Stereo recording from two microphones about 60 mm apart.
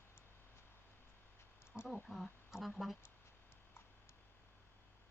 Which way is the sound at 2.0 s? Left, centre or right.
Centre.